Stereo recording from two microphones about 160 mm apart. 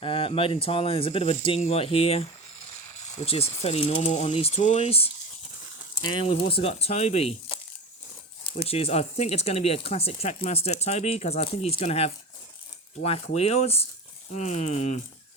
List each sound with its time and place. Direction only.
0.0 s speech: 35° left (ahead or behind)
6.2 s speech: 35° left (ahead or behind)